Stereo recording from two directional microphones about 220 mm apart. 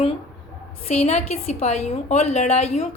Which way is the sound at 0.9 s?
30° left (ahead or behind).